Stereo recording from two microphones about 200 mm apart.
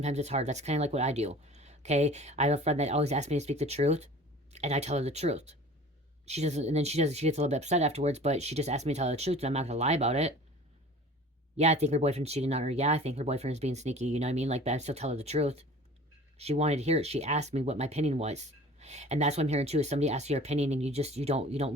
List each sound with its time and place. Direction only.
0.0 s speech: 35° right (ahead or behind)
11.5 s speech: 35° right (ahead or behind)